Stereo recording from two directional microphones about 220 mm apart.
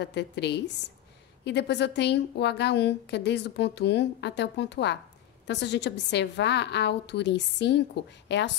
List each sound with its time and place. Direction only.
0.0 s a woman's voice: 50° left (ahead or behind)